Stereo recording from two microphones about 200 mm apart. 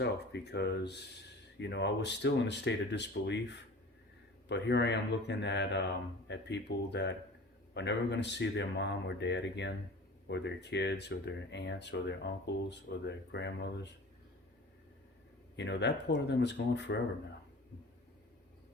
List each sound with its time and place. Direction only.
0.0 s speech: 55° left (ahead or behind)
4.4 s speech: 60° left (ahead or behind)
15.5 s speech: 60° left (ahead or behind)